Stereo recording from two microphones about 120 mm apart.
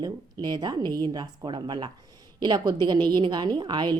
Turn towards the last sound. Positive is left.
turn(degrees=-40)  # may be behind; listen again after turning